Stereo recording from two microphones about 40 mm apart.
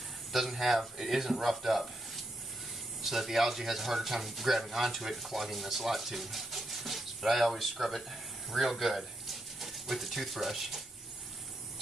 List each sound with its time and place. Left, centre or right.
0.3 s speech: centre
3.0 s speech: centre